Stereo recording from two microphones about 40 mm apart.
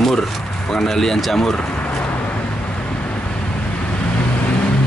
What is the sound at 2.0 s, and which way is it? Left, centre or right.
Vehicle, left.